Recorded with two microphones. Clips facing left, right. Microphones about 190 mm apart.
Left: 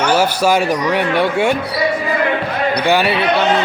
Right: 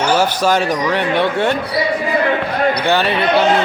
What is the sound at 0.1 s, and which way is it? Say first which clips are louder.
Speech: left 1 dB; 10° left (ahead or behind).